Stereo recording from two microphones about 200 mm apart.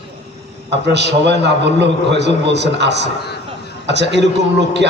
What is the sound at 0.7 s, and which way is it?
A man's voice, 60° right (ahead or behind).